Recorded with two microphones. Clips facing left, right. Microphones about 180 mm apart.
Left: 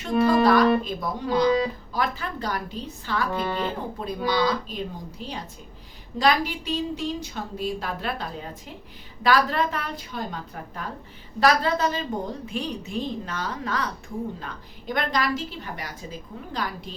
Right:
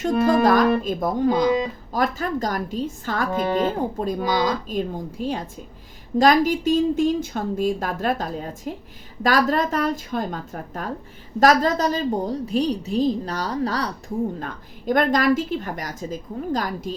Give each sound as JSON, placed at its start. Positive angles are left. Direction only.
{"t": 0.0, "sound": "a woman's voice", "side_deg": -45}
{"t": 14.3, "sound": "speech", "side_deg": -45}